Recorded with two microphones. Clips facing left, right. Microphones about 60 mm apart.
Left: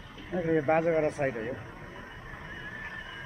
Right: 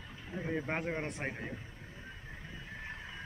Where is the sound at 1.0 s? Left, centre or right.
Centre.